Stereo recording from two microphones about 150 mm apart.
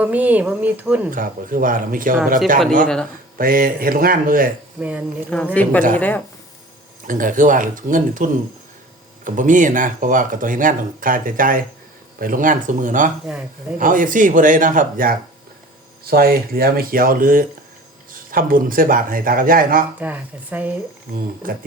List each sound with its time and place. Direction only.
0.0 s speech: 10° right (ahead or behind)
1.1 s speech: 65° right (ahead or behind)
2.8 s speech: 5° left (ahead or behind)
3.3 s speech: 75° right (ahead or behind)
4.8 s speech: 10° right (ahead or behind)
5.3 s speech: 5° left (ahead or behind)
7.1 s speech: 65° right (ahead or behind)
13.3 s speech: 5° right (ahead or behind)
13.7 s speech: 65° right (ahead or behind)
16.0 s speech: 85° right
20.0 s speech: 10° right (ahead or behind)
21.4 s speech: 70° right (ahead or behind)